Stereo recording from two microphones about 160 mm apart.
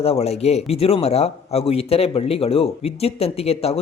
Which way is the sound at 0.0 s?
40° left (ahead or behind).